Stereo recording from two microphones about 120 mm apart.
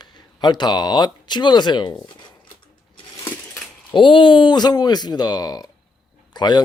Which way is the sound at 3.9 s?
45° left (ahead or behind).